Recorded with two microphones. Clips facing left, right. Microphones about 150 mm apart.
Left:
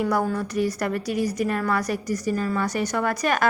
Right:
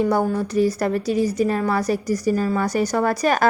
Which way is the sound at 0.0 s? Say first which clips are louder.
Right 4 dB; 30° right (ahead or behind).